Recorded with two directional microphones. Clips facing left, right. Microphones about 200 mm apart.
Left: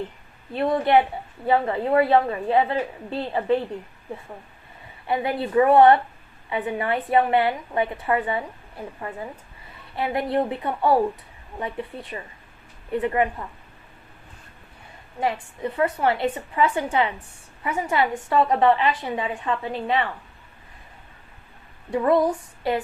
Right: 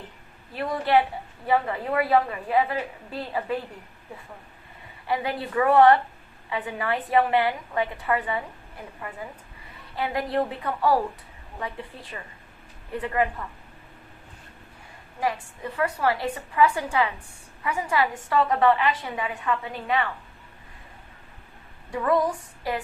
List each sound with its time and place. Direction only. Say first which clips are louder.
0.5 s a woman's voice: left 4 dB; 25° left (ahead or behind)
5.0 s a woman's voice: left 3 dB; 25° left (ahead or behind)
9.9 s a woman's voice: left 3 dB; 25° left (ahead or behind)
15.2 s a woman's voice: left 3 dB; 25° left (ahead or behind)
21.9 s a woman's voice: left 4 dB; 25° left (ahead or behind)